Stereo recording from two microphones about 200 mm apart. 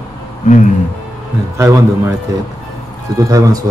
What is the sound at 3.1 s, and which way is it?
Speech, 15° right (ahead or behind).